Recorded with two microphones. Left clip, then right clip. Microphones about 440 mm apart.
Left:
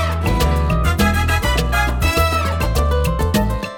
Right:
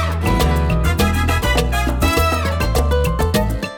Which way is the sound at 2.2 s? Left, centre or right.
Right.